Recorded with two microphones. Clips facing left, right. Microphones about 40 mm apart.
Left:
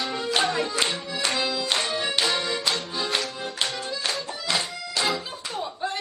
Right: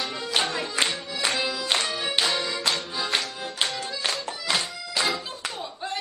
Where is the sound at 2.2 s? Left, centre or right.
Centre.